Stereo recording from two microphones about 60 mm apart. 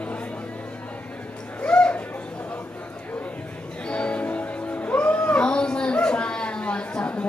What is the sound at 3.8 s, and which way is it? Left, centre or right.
Music, centre.